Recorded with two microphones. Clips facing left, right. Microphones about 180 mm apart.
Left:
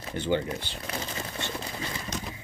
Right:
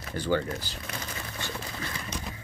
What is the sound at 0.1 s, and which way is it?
Speech, 20° left (ahead or behind).